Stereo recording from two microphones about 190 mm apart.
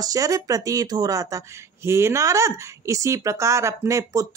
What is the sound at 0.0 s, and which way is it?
Speech, 20° right (ahead or behind).